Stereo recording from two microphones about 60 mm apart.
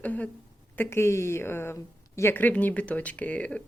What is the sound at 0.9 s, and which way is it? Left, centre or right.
Speech, left.